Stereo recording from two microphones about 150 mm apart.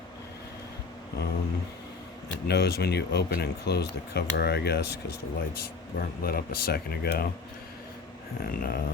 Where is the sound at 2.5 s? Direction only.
90° left.